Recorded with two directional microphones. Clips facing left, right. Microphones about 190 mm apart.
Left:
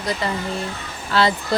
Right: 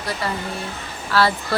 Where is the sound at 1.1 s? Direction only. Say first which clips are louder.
Left 1 dB; 20° left (ahead or behind).